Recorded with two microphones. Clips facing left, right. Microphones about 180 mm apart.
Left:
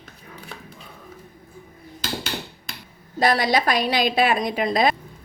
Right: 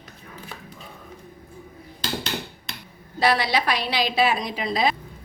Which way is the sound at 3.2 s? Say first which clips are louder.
Left 2 dB; 45° left (ahead or behind).